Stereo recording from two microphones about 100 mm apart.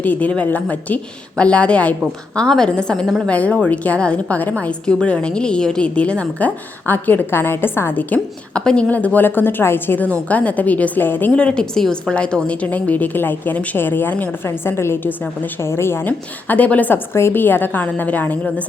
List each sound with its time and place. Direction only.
0.0 s a woman's voice: 15° left (ahead or behind)